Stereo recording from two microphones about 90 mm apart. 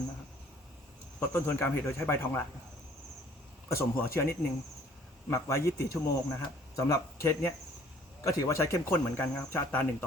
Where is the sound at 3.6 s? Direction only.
30° left (ahead or behind).